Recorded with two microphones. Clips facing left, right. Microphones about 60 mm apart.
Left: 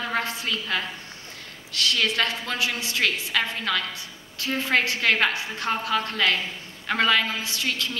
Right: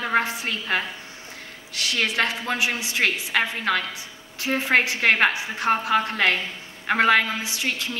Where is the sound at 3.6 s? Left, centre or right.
Right.